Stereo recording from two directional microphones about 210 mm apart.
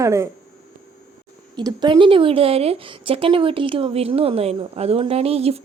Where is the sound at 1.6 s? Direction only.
20° right (ahead or behind).